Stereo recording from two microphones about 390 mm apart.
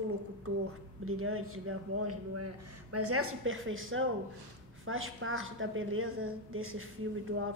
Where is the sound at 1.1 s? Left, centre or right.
Right.